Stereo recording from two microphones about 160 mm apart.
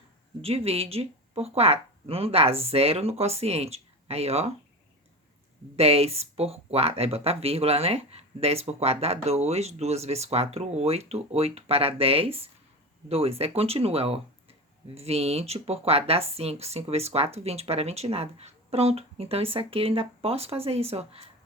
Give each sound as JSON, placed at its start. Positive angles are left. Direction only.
{"t": 0.4, "sound": "speech", "side_deg": -40}
{"t": 5.7, "sound": "speech", "side_deg": -40}